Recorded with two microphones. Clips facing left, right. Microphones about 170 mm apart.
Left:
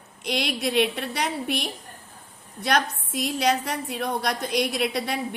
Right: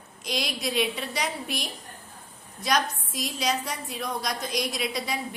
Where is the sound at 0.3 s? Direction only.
60° left (ahead or behind).